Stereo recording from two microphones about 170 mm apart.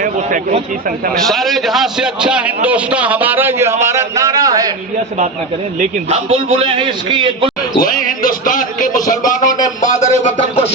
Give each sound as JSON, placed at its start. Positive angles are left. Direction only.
{"t": 1.1, "sound": "a man's voice", "side_deg": 0}
{"t": 6.1, "sound": "a man's voice", "side_deg": -35}
{"t": 7.8, "sound": "a man's voice", "side_deg": 55}